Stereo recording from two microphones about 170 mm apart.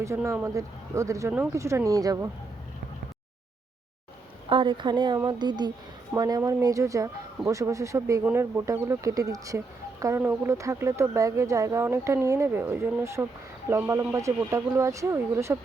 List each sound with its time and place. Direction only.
0.0 s speech: 15° right (ahead or behind)
4.4 s speech: 30° right (ahead or behind)